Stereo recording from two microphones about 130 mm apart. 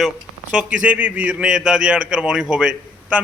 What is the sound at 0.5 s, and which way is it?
A man's voice, 10° right (ahead or behind).